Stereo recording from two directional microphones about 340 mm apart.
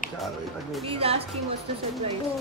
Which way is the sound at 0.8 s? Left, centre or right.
Centre.